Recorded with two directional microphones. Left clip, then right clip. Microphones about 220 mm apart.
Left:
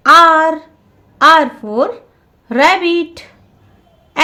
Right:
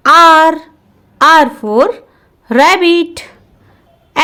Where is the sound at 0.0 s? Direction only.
35° right (ahead or behind).